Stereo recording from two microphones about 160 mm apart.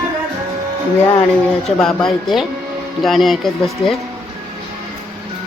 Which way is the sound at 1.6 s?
5° left (ahead or behind).